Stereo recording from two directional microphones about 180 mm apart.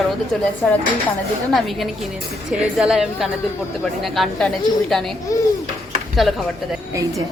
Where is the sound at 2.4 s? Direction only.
Centre (ahead or behind).